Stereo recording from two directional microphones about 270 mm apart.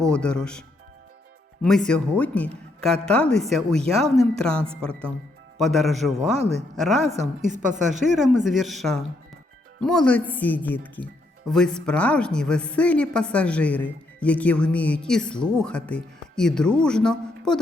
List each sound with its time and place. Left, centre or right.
0.0 s speech: centre
1.6 s speech: centre
6.3 s a woman's voice: right
6.7 s speech: centre
7.0 s a woman's voice: right
8.1 s speech: centre